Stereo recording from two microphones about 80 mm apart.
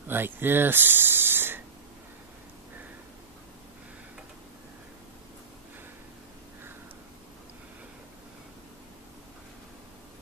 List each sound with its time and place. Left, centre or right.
0.1 s speech: right